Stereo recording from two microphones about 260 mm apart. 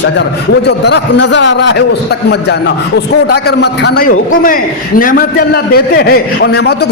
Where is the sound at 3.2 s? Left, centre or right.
Left.